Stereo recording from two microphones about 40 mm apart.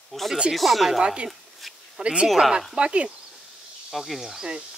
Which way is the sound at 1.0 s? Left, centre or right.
Right.